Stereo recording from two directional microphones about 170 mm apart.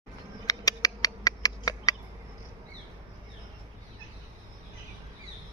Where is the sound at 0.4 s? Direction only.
20° left (ahead or behind).